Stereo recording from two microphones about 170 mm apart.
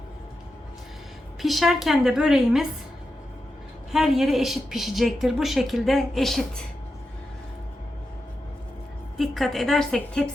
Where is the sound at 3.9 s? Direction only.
Centre (ahead or behind).